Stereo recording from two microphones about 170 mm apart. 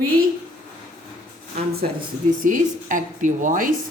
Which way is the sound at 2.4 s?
50° right (ahead or behind).